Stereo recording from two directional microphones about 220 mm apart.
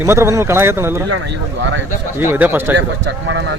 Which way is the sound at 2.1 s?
10° right (ahead or behind).